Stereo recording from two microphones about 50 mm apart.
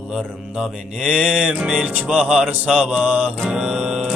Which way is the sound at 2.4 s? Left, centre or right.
Right.